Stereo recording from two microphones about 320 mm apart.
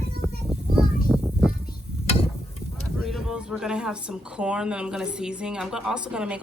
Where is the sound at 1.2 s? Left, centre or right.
Centre.